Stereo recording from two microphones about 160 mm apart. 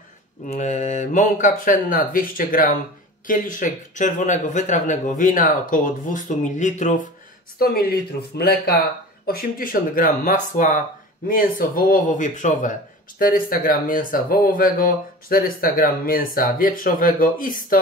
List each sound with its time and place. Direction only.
0.5 s a man's voice: 45° left (ahead or behind)
7.5 s speech: 75° left (ahead or behind)
9.2 s speech: 65° left (ahead or behind)
13.2 s speech: 65° left (ahead or behind)